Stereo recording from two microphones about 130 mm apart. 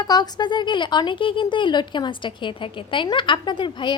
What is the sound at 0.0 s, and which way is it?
Speech, 35° left (ahead or behind).